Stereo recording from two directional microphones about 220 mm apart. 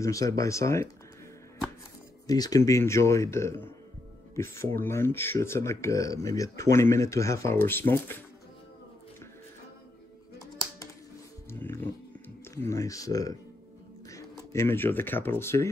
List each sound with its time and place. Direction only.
0.0 s speech: 15° left (ahead or behind)
2.2 s speech: 15° left (ahead or behind)
4.7 s speech: 10° left (ahead or behind)
11.5 s music: 10° left (ahead or behind)
12.6 s speech: 15° left (ahead or behind)